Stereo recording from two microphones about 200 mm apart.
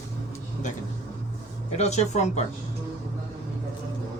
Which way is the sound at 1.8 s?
35° left (ahead or behind).